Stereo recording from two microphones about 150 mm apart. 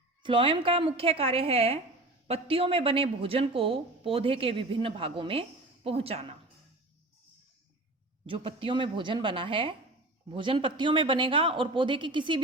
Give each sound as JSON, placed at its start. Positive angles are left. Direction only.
{"t": 0.2, "sound": "speech", "side_deg": -35}
{"t": 8.3, "sound": "speech", "side_deg": -40}